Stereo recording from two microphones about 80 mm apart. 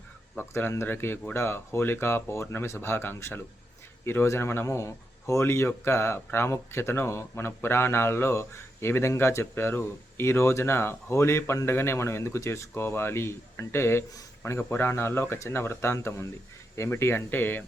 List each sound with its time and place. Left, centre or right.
0.3 s speech: left